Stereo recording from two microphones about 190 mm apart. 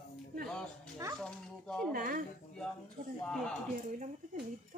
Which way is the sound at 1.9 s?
50° right (ahead or behind).